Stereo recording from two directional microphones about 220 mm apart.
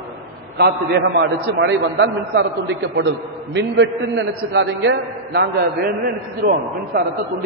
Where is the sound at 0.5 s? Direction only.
50° right (ahead or behind).